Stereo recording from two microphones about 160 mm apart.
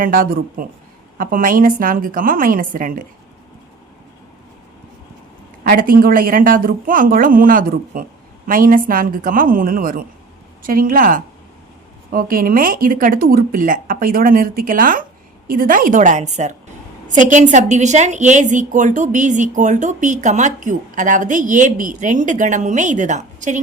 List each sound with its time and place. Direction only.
0.0 s speech: 60° right (ahead or behind)
5.6 s a woman's voice: 60° right (ahead or behind)